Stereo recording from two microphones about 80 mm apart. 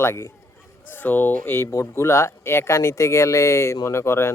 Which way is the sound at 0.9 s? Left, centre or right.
Left.